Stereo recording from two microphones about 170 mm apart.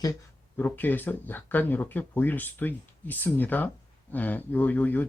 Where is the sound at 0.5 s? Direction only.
10° left (ahead or behind).